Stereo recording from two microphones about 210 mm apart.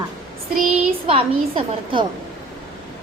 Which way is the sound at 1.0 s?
25° right (ahead or behind).